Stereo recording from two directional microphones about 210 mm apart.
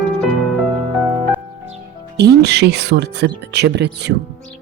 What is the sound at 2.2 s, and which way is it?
Speech, 50° right (ahead or behind).